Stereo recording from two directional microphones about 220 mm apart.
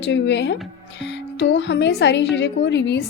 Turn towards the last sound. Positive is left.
turn(degrees=55)  # may be behind; listen again after turning